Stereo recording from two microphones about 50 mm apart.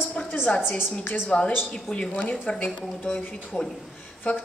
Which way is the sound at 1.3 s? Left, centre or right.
Centre.